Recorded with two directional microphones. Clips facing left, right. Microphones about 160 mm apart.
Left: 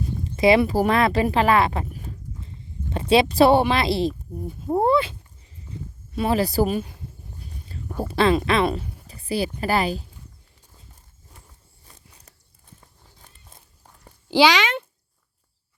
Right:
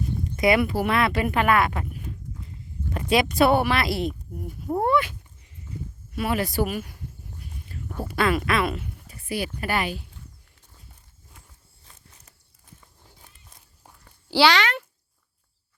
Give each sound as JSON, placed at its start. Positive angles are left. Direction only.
{"t": 0.3, "sound": "a woman's voice", "side_deg": 25}
{"t": 6.1, "sound": "a sound", "side_deg": 30}
{"t": 8.0, "sound": "speech", "side_deg": 30}
{"t": 14.3, "sound": "a child's voice", "side_deg": 15}